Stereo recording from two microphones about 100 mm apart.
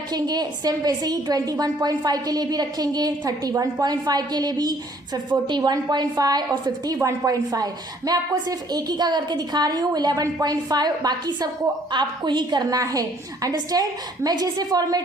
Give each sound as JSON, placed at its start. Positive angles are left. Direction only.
{"t": 0.1, "sound": "a woman's voice", "side_deg": -45}